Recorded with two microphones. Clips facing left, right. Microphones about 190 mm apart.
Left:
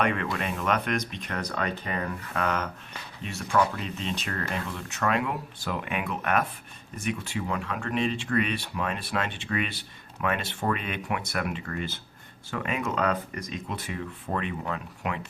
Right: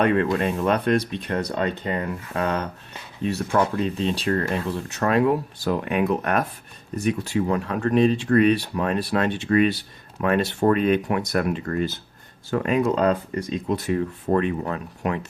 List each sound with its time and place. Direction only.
0.0 s speech: 30° right (ahead or behind)